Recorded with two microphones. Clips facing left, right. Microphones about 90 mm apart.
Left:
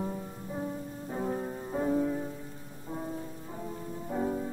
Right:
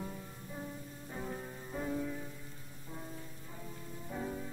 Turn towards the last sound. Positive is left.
turn(degrees=35)  # may be behind; listen again after turning